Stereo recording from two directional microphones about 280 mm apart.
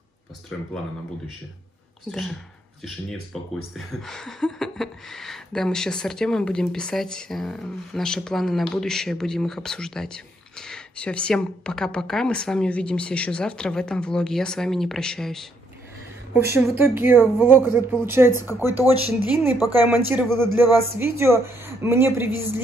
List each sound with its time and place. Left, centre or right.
0.5 s speech: centre
2.0 s speech: centre
3.3 s a woman's voice: centre